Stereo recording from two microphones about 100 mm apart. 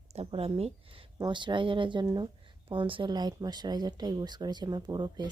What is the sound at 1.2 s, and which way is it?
Speech, 50° right (ahead or behind).